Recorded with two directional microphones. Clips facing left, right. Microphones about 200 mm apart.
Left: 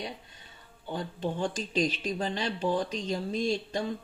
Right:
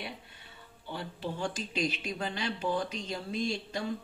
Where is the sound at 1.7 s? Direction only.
35° left (ahead or behind).